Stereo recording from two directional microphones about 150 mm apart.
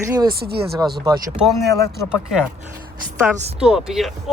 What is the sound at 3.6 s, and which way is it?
Speech, 5° right (ahead or behind).